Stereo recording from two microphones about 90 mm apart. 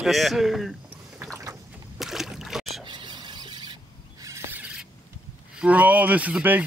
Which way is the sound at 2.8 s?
60° right (ahead or behind).